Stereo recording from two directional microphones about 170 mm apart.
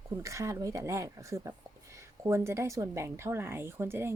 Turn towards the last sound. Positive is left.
turn(degrees=-15)  # may be behind; listen again after turning